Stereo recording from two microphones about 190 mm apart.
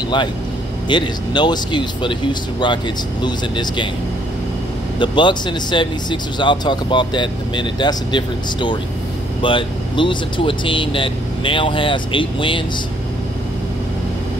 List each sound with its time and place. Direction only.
0.8 s speech: 25° left (ahead or behind)
4.9 s speech: 25° left (ahead or behind)